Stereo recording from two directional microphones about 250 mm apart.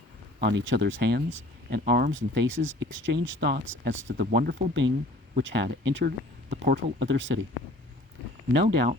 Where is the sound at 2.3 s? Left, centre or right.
Right.